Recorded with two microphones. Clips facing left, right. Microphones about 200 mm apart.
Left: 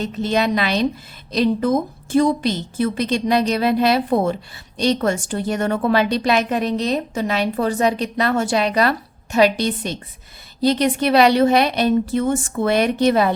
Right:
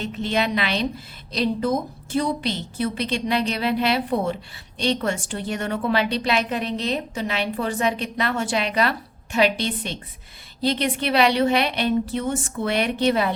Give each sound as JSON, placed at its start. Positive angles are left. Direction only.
{"t": 0.0, "sound": "a woman's voice", "side_deg": 40}